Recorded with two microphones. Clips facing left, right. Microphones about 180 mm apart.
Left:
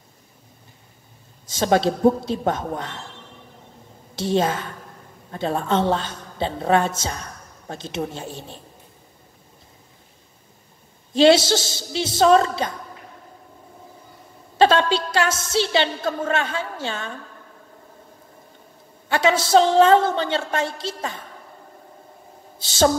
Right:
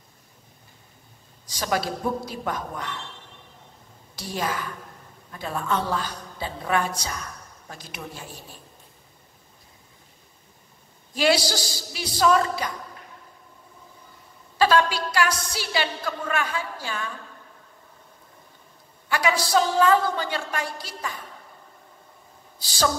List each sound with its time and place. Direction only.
1.4 s a woman's voice: 25° left (ahead or behind)
4.1 s a woman's voice: 25° left (ahead or behind)
11.1 s a woman's voice: 25° left (ahead or behind)
14.6 s a woman's voice: 25° left (ahead or behind)
19.0 s a woman's voice: 25° left (ahead or behind)
22.6 s a woman's voice: 25° left (ahead or behind)